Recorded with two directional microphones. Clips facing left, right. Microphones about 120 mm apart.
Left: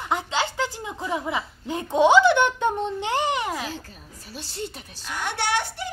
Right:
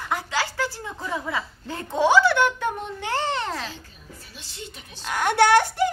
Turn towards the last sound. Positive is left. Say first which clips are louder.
# right 9 dB
turn(degrees=-50)  # may be behind; listen again after turning